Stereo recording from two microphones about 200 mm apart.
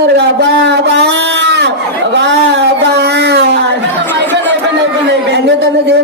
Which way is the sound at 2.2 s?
60° right (ahead or behind).